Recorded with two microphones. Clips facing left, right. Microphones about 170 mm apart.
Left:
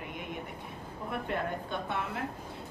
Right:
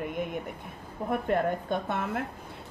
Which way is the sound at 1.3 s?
45° right (ahead or behind).